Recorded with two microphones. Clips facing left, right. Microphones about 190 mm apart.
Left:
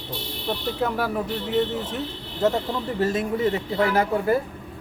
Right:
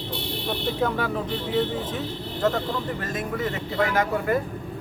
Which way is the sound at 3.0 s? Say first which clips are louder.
Left 7 dB; 30° left (ahead or behind).